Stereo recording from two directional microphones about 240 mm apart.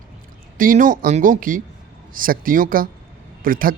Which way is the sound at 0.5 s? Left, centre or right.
Right.